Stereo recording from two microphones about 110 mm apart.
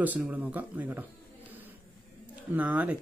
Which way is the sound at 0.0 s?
15° right (ahead or behind).